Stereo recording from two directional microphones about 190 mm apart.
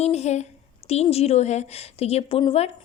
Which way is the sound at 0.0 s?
35° left (ahead or behind).